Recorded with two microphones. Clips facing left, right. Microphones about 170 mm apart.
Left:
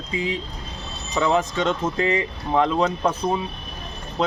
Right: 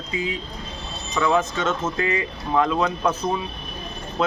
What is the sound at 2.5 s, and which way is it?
Speech, 25° left (ahead or behind).